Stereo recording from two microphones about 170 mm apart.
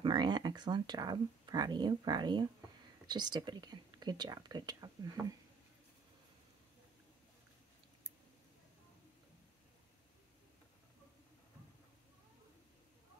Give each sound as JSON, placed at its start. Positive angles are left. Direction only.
{"t": 0.0, "sound": "speech", "side_deg": -25}